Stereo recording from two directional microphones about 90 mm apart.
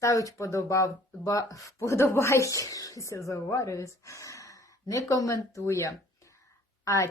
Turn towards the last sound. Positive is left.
turn(degrees=40)  # may be behind; listen again after turning